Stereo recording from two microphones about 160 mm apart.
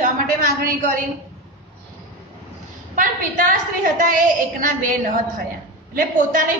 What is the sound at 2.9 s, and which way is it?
A woman's voice, 55° right (ahead or behind).